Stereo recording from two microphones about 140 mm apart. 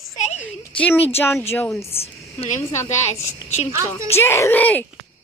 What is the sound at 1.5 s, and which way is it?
Turkey, 15° left (ahead or behind).